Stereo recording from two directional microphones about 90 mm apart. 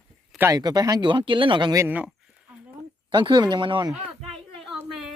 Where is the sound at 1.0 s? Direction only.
65° right (ahead or behind).